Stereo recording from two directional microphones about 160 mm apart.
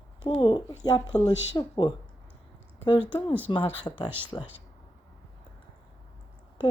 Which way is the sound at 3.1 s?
30° left (ahead or behind).